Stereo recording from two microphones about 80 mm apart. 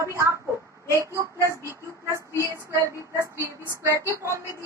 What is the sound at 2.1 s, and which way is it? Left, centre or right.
Child singing, right.